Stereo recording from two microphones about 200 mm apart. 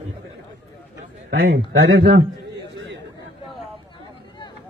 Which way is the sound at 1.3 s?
50° right (ahead or behind).